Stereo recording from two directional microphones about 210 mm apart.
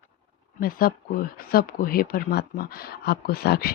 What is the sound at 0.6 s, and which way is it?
Speech, 45° left (ahead or behind).